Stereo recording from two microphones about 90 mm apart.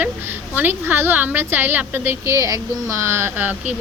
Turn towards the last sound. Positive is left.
turn(degrees=-20)  # may be behind; listen again after turning